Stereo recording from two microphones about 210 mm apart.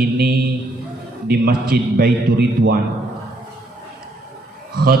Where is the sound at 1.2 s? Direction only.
45° right (ahead or behind).